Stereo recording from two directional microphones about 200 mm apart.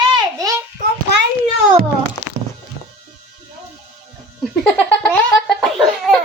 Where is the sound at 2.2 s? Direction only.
15° left (ahead or behind).